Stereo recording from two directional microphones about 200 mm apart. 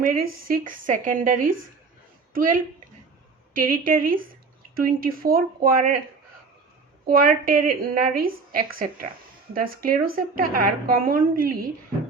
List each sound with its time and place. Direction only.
0.0 s a woman's voice: 45° right (ahead or behind)
7.0 s a woman's voice: 50° right (ahead or behind)